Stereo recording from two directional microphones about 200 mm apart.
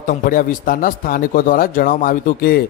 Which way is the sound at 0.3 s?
45° left (ahead or behind).